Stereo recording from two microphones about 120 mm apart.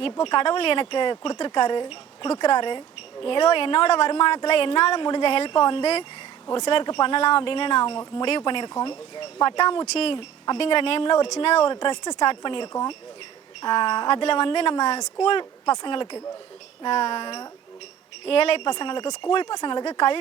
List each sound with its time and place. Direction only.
0.0 s speech: 45° left (ahead or behind)
9.8 s speech: 60° left (ahead or behind); by 17.5 s 35° left (ahead or behind)
18.3 s speech: 50° left (ahead or behind)
18.7 s speech: 40° left (ahead or behind)